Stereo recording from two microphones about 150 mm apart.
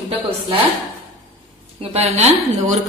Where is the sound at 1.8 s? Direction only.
45° right (ahead or behind).